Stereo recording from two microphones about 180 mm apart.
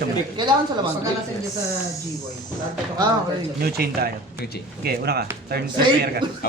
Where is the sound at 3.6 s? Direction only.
60° right (ahead or behind).